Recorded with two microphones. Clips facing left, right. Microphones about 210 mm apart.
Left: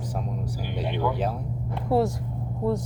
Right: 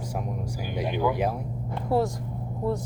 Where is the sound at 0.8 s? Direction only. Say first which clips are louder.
Right 2 dB; 10° right (ahead or behind).